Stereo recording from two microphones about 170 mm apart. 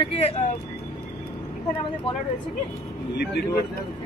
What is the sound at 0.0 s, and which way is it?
Speech, 35° left (ahead or behind).